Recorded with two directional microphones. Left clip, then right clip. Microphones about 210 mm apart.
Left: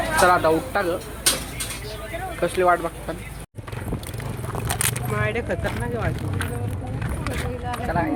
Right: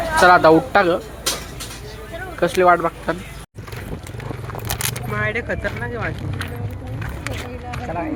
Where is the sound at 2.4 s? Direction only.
15° right (ahead or behind).